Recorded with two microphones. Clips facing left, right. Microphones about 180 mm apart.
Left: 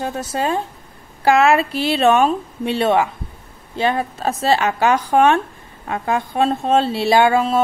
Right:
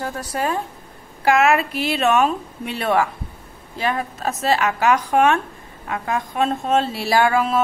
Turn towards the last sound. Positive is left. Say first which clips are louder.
# left 3 dB
turn(degrees=25)  # may be behind; listen again after turning